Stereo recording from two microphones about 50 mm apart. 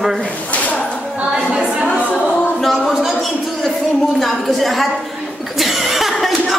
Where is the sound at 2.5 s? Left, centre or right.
Centre.